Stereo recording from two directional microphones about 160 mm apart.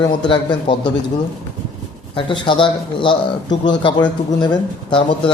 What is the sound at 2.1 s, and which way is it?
A man's voice, 30° left (ahead or behind).